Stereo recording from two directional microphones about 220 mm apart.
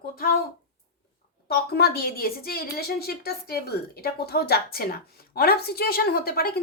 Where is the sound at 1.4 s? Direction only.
45° left (ahead or behind).